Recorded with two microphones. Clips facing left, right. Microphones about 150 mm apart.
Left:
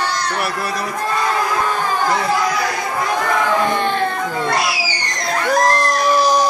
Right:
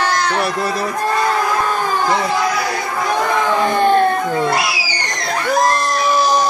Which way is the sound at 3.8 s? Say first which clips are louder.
Right 6 dB; 45° right (ahead or behind).